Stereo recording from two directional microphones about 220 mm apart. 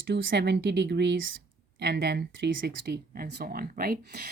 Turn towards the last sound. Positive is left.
turn(degrees=-45)  # may be behind; listen again after turning